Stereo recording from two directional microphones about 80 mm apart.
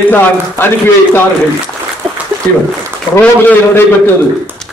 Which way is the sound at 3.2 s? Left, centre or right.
Left.